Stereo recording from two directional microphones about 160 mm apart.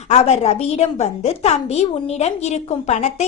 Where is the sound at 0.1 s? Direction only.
40° left (ahead or behind).